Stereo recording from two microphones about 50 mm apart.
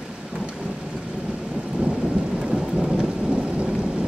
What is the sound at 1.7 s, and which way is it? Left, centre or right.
Thunder, right.